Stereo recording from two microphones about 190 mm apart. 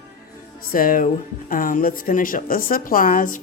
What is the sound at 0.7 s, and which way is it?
Speech, 50° left (ahead or behind).